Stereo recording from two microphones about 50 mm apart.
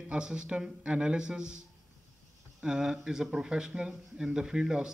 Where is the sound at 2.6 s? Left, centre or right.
Centre.